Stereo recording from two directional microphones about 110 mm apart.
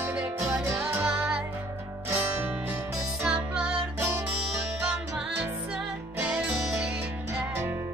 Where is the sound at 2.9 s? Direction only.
10° right (ahead or behind).